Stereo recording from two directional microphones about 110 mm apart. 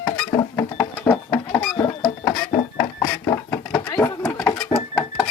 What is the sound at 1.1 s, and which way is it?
Chicken, 25° left (ahead or behind).